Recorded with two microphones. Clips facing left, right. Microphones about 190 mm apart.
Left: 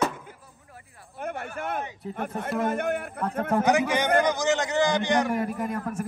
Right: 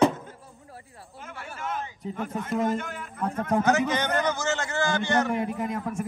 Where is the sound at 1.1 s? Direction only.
60° left (ahead or behind).